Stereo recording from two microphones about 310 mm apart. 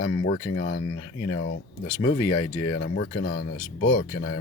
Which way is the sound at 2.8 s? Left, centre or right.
Left.